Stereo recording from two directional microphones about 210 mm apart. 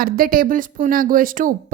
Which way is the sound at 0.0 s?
45° right (ahead or behind).